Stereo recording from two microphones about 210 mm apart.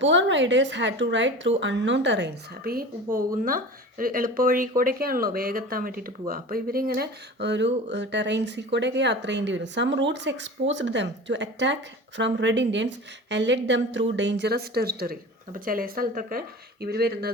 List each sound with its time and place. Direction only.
0.0 s a woman's voice: 60° right (ahead or behind)